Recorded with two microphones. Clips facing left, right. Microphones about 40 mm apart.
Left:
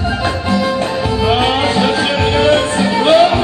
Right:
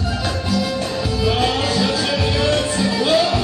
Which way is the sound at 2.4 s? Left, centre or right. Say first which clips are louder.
Left 7 dB; left.